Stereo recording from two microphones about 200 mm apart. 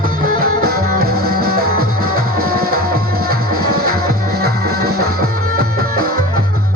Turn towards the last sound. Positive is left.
turn(degrees=-45)  # may be behind; listen again after turning